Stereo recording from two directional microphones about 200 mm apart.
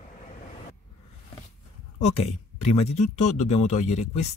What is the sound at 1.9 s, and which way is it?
Speech, 35° left (ahead or behind).